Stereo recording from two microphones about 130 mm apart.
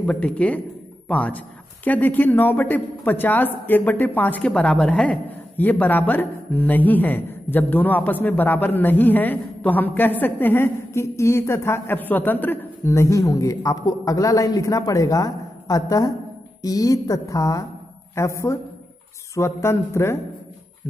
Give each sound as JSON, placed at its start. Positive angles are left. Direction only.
{"t": 0.0, "sound": "a woman's voice", "side_deg": 5}